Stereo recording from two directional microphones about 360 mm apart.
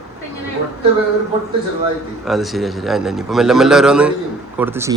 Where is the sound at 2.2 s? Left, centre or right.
Centre.